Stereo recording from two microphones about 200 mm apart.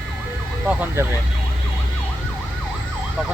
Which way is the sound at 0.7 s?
10° right (ahead or behind).